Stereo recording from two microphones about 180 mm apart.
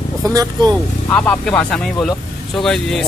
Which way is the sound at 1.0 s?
10° left (ahead or behind).